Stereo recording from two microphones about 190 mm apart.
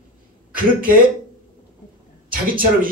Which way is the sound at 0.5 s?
45° right (ahead or behind).